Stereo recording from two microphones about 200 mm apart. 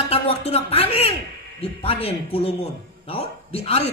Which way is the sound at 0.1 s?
30° left (ahead or behind).